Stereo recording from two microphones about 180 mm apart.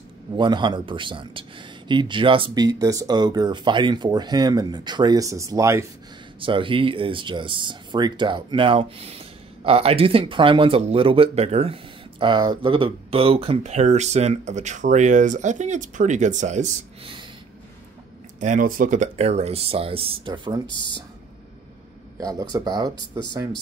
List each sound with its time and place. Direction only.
0.4 s speech: 25° right (ahead or behind)
6.4 s speech: 30° right (ahead or behind)
18.4 s speech: 45° right (ahead or behind); by 20.6 s 25° right (ahead or behind)
20.7 s speech: 75° right (ahead or behind)
22.2 s speech: 20° right (ahead or behind)